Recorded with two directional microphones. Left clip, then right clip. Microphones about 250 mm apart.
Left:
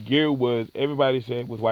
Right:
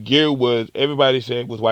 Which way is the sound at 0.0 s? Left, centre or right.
Right.